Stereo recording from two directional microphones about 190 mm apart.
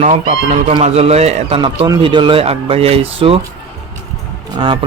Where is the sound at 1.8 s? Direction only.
20° right (ahead or behind).